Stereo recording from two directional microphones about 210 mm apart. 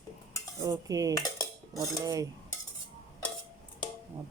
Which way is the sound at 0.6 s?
15° right (ahead or behind).